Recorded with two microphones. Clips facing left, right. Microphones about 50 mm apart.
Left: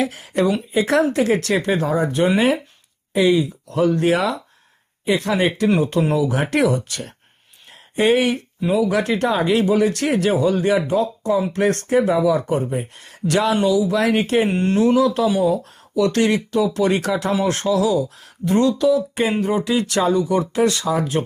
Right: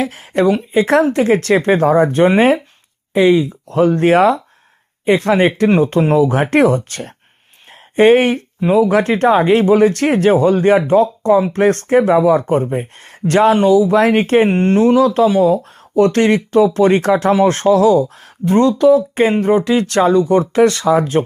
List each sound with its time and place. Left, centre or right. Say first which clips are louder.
0.0 s speech: right 4 dB; right